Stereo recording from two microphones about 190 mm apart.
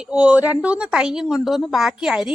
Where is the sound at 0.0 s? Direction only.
5° right (ahead or behind).